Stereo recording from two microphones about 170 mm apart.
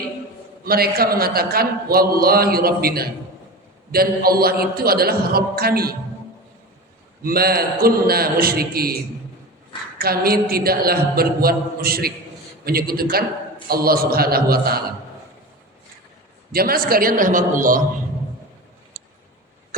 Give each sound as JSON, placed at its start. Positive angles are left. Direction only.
{"t": 0.6, "sound": "a man's voice", "side_deg": -65}
{"t": 7.2, "sound": "a man's voice", "side_deg": -60}
{"t": 10.0, "sound": "a man's voice", "side_deg": -65}
{"t": 16.5, "sound": "a man's voice", "side_deg": -60}